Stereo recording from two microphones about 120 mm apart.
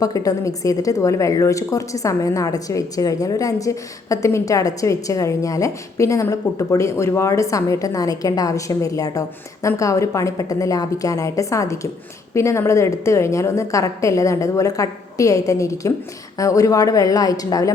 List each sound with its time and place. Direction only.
0.0 s a woman's voice: 30° left (ahead or behind)